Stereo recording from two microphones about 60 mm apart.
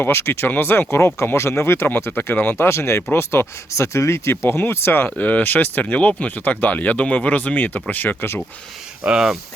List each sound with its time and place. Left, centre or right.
0.0 s speech: left
3.7 s speech: left
4.4 s speech: left
5.0 s speech: left
9.0 s speech: centre